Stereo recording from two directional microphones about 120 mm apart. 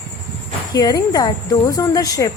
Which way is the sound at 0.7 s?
30° left (ahead or behind).